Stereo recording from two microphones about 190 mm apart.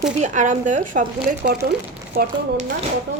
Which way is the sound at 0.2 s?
40° right (ahead or behind).